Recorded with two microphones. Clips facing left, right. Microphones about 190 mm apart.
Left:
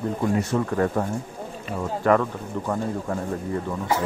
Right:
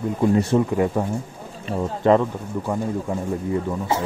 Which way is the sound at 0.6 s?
15° right (ahead or behind).